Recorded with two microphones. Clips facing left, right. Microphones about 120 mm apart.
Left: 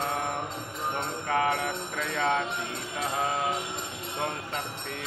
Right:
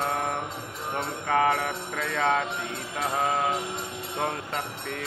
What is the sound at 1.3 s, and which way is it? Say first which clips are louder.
Speech: right 3 dB; 45° right (ahead or behind).